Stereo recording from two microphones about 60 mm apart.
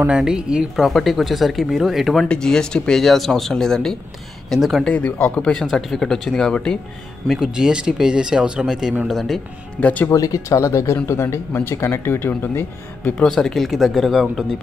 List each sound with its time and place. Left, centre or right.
0.1 s speech: centre
0.7 s speech: centre
2.2 s speech: centre
4.5 s speech: centre
4.8 s speech: left
5.5 s speech: centre
7.3 s speech: centre
9.0 s speech: centre
9.8 s speech: left
10.0 s speech: left
13.2 s speech: centre